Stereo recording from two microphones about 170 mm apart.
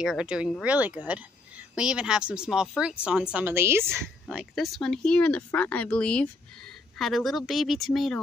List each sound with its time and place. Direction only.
0.0 s a woman's voice: 5° right (ahead or behind)